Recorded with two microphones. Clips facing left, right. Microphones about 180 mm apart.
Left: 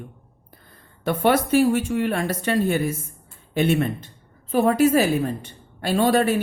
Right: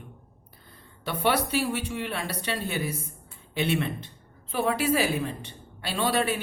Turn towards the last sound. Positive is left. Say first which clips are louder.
# left 7 dB
turn(degrees=45)  # may be behind; listen again after turning